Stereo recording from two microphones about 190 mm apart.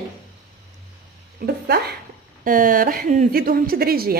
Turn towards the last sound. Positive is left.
turn(degrees=-50)  # may be behind; listen again after turning